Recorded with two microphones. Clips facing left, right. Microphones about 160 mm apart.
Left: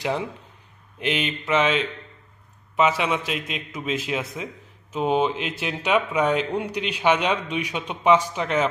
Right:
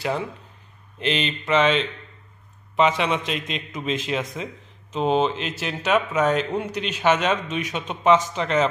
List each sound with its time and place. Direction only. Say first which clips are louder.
0.0 s a man's voice: even; 15° left (ahead or behind)